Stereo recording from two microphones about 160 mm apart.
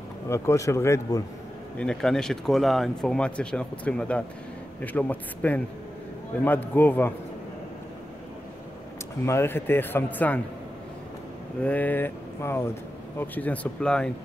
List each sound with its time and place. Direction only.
0.3 s speech: 15° left (ahead or behind)
1.8 s speech: 5° left (ahead or behind)
6.7 s speech: 10° left (ahead or behind)
9.2 s speech: 15° left (ahead or behind)
11.6 s speech: 10° left (ahead or behind)